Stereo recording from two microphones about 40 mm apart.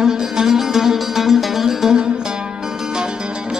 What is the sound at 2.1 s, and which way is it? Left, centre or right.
Music, right.